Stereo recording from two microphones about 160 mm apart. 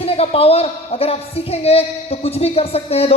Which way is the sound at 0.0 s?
40° left (ahead or behind).